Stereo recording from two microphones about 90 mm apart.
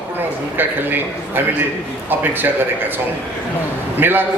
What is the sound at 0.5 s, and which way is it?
A man's voice, 20° right (ahead or behind).